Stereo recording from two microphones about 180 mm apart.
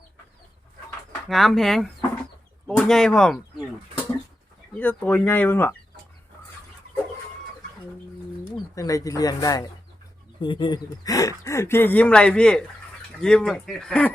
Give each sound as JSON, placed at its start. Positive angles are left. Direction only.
{"t": 1.3, "sound": "speech", "side_deg": 0}
{"t": 4.8, "sound": "speech", "side_deg": 10}
{"t": 8.5, "sound": "speech", "side_deg": 20}